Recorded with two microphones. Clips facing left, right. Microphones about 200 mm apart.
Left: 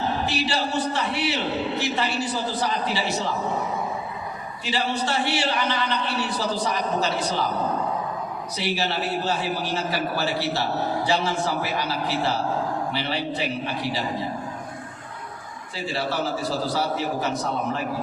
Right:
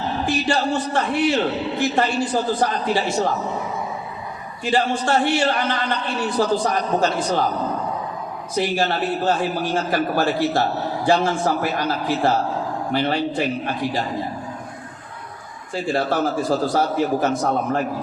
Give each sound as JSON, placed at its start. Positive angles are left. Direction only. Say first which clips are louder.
{"t": 0.3, "sound": "a man's voice", "louder": "right 5 dB", "side_deg": -50}
{"t": 4.6, "sound": "a man's voice", "louder": "right 6 dB", "side_deg": -50}
{"t": 8.5, "sound": "a man's voice", "louder": "right 6 dB", "side_deg": -50}
{"t": 15.7, "sound": "a man's voice", "louder": "right 6 dB", "side_deg": -50}